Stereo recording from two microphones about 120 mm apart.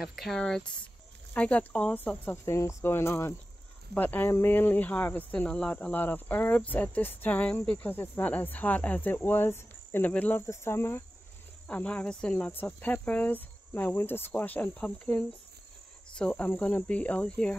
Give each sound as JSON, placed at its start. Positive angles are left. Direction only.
{"t": 0.0, "sound": "speech", "side_deg": 0}
{"t": 3.9, "sound": "cricket", "side_deg": 15}
{"t": 10.4, "sound": "speech", "side_deg": 25}
{"t": 11.6, "sound": "cricket", "side_deg": 10}